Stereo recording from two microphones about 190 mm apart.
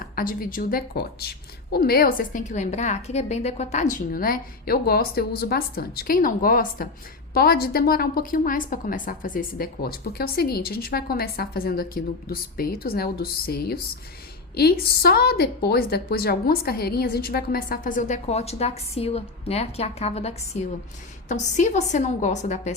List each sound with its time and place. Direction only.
0.0 s a woman's voice: 50° left (ahead or behind)